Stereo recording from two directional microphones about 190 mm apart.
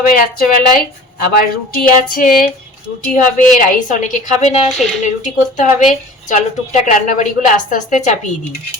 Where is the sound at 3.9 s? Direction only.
40° left (ahead or behind).